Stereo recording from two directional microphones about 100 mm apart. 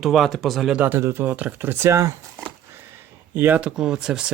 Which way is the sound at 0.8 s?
20° right (ahead or behind).